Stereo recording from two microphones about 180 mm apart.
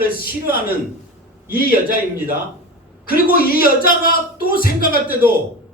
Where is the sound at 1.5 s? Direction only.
55° left (ahead or behind).